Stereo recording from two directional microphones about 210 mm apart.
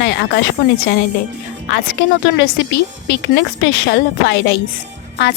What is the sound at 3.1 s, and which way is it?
A woman's voice, 55° left (ahead or behind).